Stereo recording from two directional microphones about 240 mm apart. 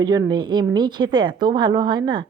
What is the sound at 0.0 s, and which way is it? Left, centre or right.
A woman's voice, centre.